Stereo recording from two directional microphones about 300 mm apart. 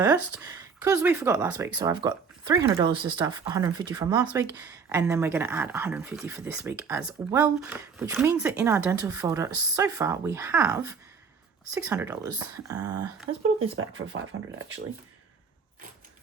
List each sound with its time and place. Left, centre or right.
0.0 s speech: centre
13.3 s speech: right